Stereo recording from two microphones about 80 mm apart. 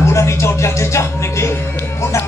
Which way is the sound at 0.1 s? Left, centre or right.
Left.